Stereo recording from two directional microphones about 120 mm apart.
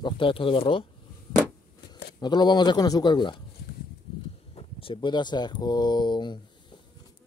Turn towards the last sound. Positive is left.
turn(degrees=40)  # may be behind; listen again after turning